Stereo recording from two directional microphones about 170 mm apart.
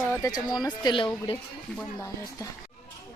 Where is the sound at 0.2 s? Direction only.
20° left (ahead or behind).